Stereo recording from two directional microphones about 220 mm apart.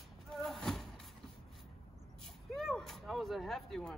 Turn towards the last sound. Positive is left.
turn(degrees=0)  # may be behind; listen again after turning